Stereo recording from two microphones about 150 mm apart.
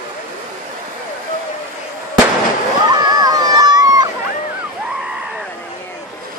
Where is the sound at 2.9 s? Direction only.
25° right (ahead or behind).